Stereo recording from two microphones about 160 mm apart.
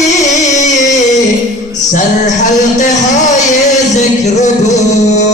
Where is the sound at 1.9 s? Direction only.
50° left (ahead or behind).